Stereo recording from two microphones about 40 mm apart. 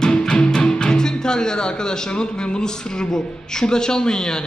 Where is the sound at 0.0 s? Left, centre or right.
Centre.